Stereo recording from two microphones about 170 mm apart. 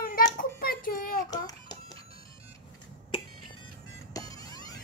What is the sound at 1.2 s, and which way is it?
Babbling, 20° left (ahead or behind).